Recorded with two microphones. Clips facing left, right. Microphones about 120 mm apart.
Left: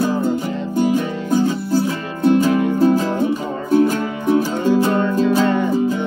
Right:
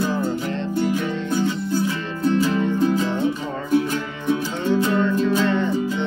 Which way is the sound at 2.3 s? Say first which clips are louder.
Left 4 dB; 50° left (ahead or behind).